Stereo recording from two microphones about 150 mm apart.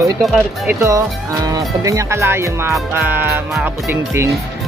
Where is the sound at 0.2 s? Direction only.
Centre (ahead or behind).